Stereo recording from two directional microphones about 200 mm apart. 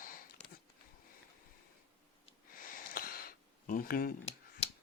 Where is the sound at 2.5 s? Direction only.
45° left (ahead or behind).